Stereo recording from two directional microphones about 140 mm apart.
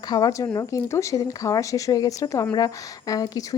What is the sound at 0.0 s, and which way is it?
Speech, 30° left (ahead or behind).